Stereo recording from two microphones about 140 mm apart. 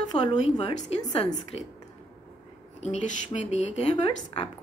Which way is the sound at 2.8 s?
55° left (ahead or behind).